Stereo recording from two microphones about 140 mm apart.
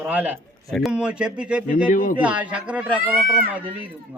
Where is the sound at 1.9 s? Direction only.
90° left.